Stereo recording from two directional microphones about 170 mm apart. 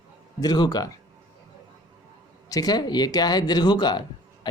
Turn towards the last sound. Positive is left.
turn(degrees=25)  # may be behind; listen again after turning